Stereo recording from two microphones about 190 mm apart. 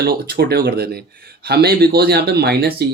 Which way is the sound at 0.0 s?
55° right (ahead or behind).